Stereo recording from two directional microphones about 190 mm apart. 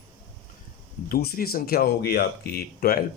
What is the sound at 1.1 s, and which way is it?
Speech, 50° left (ahead or behind).